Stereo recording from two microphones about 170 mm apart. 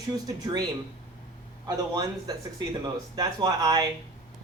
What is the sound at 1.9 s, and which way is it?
Speech, 25° right (ahead or behind).